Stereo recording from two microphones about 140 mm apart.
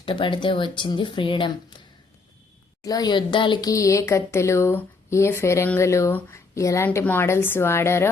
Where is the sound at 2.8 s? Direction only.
25° left (ahead or behind).